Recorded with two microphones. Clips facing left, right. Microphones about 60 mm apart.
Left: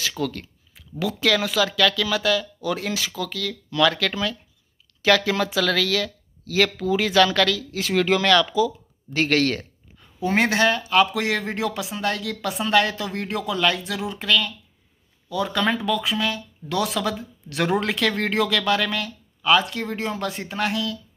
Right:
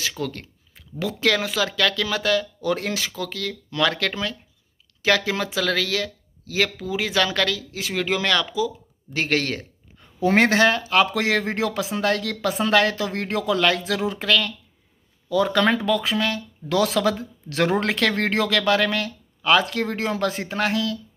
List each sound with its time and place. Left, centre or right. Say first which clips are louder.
0.2 s speech: left 2 dB; right
10.2 s speech: right 3 dB; right
20.4 s speech: right 2 dB; right